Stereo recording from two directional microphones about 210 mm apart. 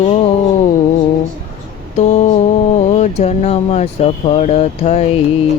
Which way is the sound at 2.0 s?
35° left (ahead or behind).